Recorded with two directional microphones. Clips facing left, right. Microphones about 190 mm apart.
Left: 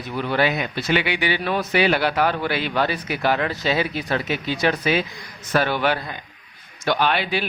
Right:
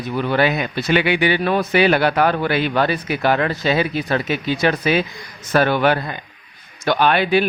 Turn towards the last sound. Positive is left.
turn(degrees=-55)  # may be behind; listen again after turning